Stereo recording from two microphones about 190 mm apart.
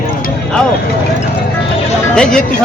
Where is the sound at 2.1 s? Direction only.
5° left (ahead or behind).